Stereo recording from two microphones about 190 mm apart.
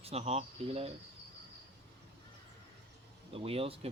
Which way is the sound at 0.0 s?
35° right (ahead or behind).